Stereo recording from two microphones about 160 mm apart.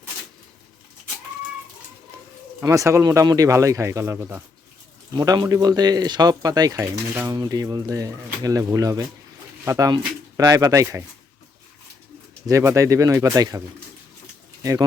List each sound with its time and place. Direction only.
2.6 s speech: 20° right (ahead or behind)
12.5 s speech: 20° right (ahead or behind)
14.6 s speech: 20° right (ahead or behind)